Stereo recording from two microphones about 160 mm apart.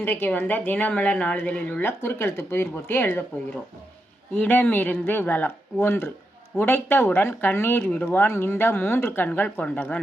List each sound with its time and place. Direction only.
0.0 s speech: 10° left (ahead or behind)
4.4 s speech: 10° left (ahead or behind)